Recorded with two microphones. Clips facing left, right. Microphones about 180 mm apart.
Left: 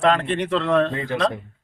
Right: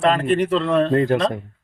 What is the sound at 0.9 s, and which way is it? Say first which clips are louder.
Speech: right 10 dB; 45° right (ahead or behind).